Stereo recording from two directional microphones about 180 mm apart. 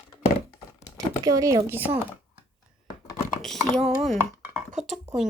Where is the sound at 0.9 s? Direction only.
20° right (ahead or behind).